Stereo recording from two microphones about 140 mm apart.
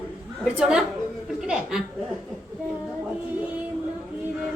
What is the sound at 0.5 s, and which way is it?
A woman's voice, 5° right (ahead or behind).